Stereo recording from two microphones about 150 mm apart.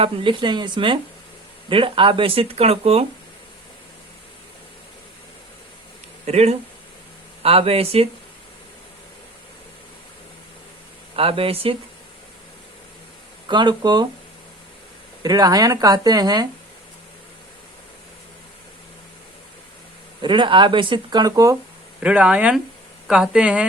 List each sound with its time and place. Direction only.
0.0 s speech: 35° right (ahead or behind)
6.2 s speech: 45° right (ahead or behind)
11.2 s speech: 40° right (ahead or behind)
13.5 s speech: 30° right (ahead or behind)
15.2 s speech: 25° right (ahead or behind)
20.2 s speech: 35° right (ahead or behind)
22.0 s speech: 10° right (ahead or behind)